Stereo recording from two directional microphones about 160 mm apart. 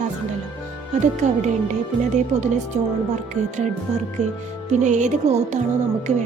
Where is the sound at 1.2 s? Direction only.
50° right (ahead or behind).